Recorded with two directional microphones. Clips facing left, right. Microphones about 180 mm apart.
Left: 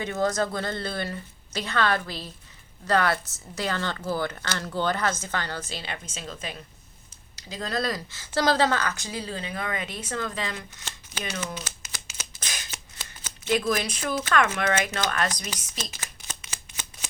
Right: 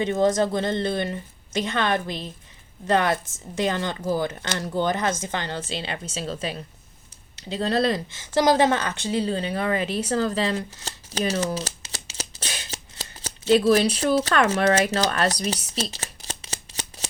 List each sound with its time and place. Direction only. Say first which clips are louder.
0.0 s a woman's voice: right 5 dB; 25° right (ahead or behind)
10.1 s shuffling cards: right 7 dB; 35° right (ahead or behind)